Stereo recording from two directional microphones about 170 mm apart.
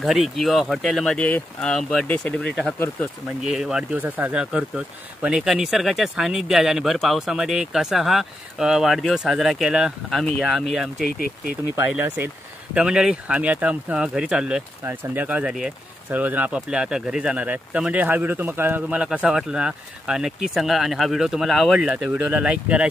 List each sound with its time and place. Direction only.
0.0 s speech: centre (ahead or behind)
3.4 s speech: centre (ahead or behind)
11.1 s speech: 60° left (ahead or behind)
11.7 s speech: 10° right (ahead or behind)